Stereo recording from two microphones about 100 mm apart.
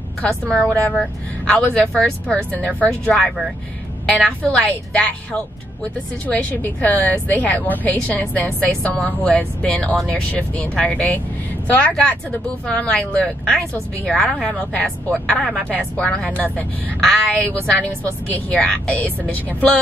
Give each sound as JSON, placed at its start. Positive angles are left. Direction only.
{"t": 0.2, "sound": "speech", "side_deg": 10}
{"t": 4.5, "sound": "speech", "side_deg": 15}